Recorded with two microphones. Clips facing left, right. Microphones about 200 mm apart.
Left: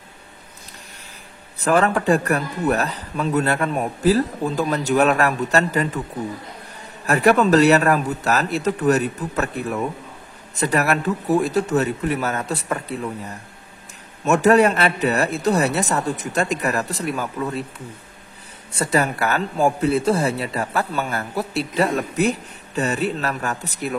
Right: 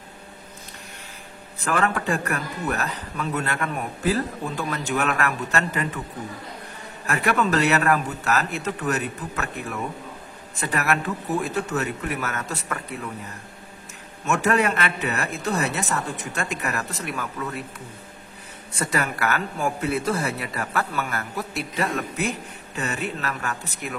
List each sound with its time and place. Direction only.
1.6 s a man's voice: 35° left (ahead or behind)
7.1 s a man's voice: 40° left (ahead or behind)
18.7 s a man's voice: 30° left (ahead or behind)